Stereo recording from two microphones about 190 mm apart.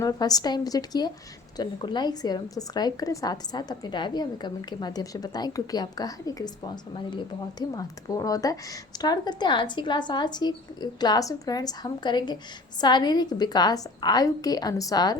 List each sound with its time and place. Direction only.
0.0 s a woman's voice: 20° left (ahead or behind)
7.6 s a woman's voice: 20° left (ahead or behind)